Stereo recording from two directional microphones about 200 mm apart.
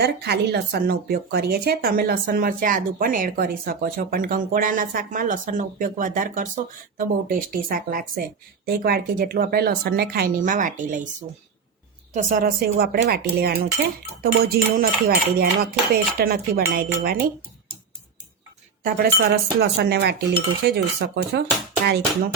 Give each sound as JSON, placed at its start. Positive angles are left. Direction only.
{"t": 0.0, "sound": "speech", "side_deg": -55}
{"t": 12.1, "sound": "speech", "side_deg": -45}
{"t": 18.8, "sound": "speech", "side_deg": -50}